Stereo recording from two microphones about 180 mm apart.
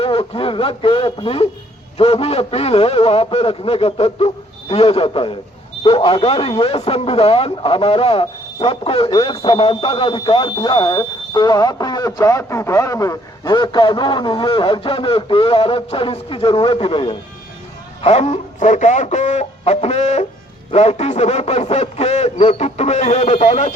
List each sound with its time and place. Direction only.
0.0 s a man's voice: 30° left (ahead or behind)